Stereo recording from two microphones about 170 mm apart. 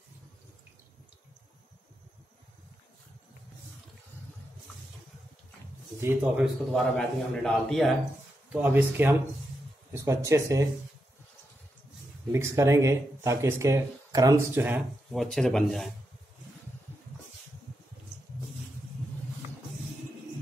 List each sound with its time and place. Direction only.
5.9 s speech: 15° right (ahead or behind)
6.4 s a man's voice: centre (ahead or behind)
8.5 s speech: 10° right (ahead or behind)
12.3 s speech: 15° right (ahead or behind)
15.0 s a man's voice: centre (ahead or behind)